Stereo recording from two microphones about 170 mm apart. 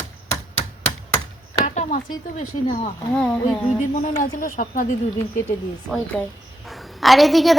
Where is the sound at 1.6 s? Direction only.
45° left (ahead or behind).